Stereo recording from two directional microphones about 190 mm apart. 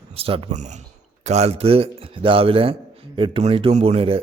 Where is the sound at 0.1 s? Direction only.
30° right (ahead or behind).